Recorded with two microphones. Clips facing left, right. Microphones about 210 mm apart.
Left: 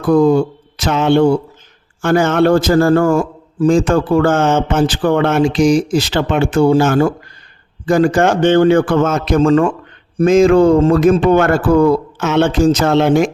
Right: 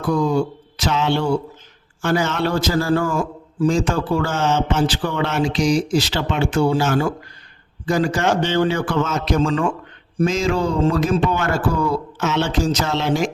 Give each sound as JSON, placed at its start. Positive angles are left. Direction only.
{"t": 0.1, "sound": "mantra", "side_deg": 55}
{"t": 2.0, "sound": "speech", "side_deg": 50}